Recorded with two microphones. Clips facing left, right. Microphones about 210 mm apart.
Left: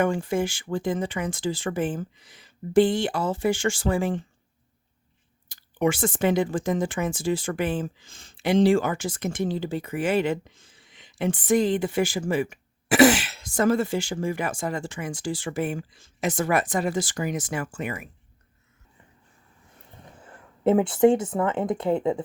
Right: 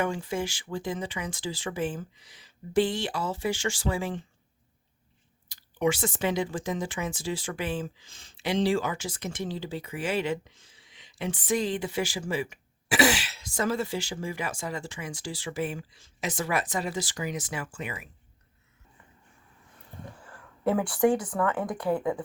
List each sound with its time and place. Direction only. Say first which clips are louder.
0.0 s speech: left 6 dB; 50° left (ahead or behind)
5.5 s speech: left 3 dB; 50° left (ahead or behind)
20.1 s speech: left 2 dB; 20° left (ahead or behind)